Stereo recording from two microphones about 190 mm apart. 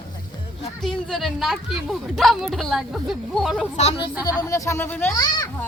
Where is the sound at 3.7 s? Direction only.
30° left (ahead or behind).